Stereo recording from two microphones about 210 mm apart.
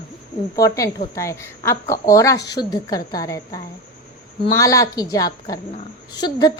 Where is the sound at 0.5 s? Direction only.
15° left (ahead or behind).